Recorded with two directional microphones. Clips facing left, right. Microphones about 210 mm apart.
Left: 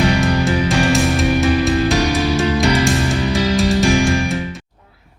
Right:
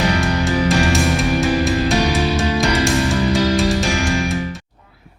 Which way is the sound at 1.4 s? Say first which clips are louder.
Left 2 dB; centre (ahead or behind).